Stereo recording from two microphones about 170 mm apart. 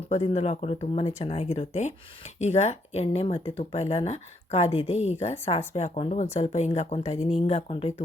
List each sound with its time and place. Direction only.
0.1 s speech: 40° left (ahead or behind)